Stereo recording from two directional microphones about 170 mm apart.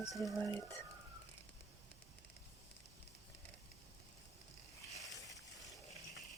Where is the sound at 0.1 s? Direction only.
Centre (ahead or behind).